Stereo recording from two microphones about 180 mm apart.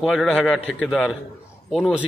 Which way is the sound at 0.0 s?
Centre (ahead or behind).